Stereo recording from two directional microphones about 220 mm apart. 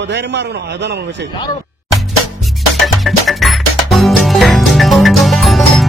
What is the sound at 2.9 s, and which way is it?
Music, centre (ahead or behind).